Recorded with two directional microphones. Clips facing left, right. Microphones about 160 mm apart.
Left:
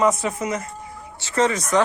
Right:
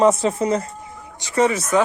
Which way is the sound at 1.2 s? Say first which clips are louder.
Right 2 dB; 15° right (ahead or behind).